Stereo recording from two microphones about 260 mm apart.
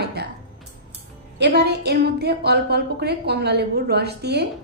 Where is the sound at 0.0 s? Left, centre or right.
Right.